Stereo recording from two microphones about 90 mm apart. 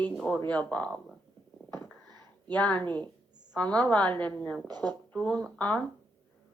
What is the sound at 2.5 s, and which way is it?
A woman's voice, 15° left (ahead or behind).